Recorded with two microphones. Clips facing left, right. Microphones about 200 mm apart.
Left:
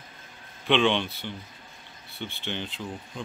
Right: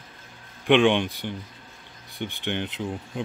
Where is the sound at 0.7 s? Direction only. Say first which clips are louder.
Right 5 dB; 15° right (ahead or behind).